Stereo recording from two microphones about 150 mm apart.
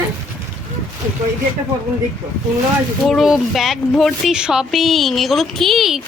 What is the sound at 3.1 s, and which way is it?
Speech, centre (ahead or behind).